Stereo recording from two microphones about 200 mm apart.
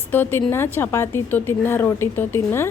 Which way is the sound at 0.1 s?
10° left (ahead or behind).